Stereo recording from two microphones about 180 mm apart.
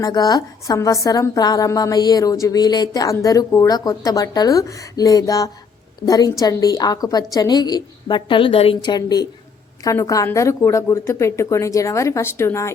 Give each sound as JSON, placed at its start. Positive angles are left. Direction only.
{"t": 0.0, "sound": "a woman's voice", "side_deg": 20}